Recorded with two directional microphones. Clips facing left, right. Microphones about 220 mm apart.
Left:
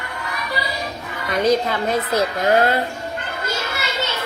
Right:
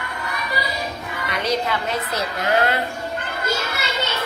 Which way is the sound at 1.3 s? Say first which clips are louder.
Left 6 dB; 50° left (ahead or behind).